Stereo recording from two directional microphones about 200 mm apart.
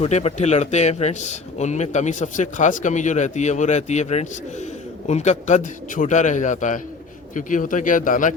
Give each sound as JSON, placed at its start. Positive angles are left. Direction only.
{"t": 0.0, "sound": "speech", "side_deg": 30}